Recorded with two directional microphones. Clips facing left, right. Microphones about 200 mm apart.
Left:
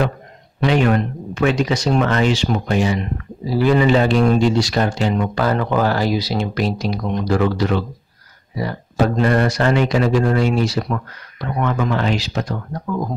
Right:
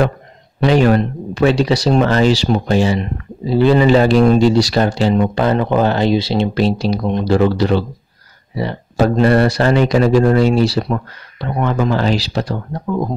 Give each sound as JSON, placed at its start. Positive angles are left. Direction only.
{"t": 0.6, "sound": "speech", "side_deg": -35}
{"t": 8.9, "sound": "speech", "side_deg": -35}
{"t": 12.8, "sound": "speech", "side_deg": -20}